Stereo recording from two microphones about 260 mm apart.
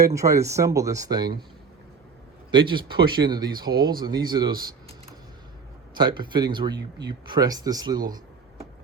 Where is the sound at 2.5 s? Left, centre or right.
Centre.